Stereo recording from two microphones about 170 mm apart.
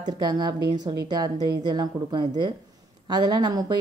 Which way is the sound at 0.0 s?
25° right (ahead or behind).